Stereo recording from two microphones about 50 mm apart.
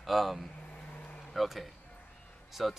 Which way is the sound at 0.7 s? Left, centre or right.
Left.